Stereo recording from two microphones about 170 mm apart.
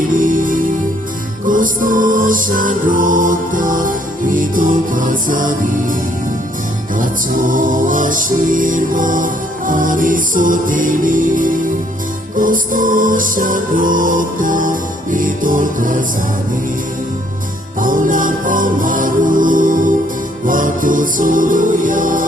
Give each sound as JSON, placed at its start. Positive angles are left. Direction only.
{"t": 0.2, "sound": "music", "side_deg": -50}
{"t": 7.0, "sound": "music", "side_deg": -50}
{"t": 17.7, "sound": "music", "side_deg": -50}